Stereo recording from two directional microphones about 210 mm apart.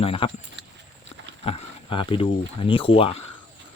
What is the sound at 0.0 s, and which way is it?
Speech, 25° left (ahead or behind).